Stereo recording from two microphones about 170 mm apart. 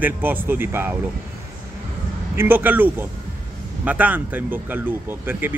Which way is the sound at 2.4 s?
10° right (ahead or behind).